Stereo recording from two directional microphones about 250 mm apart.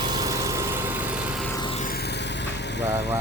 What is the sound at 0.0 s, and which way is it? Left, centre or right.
Vehicle, centre.